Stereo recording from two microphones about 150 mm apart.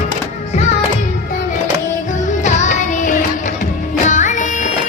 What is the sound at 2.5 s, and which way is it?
Music, 55° left (ahead or behind).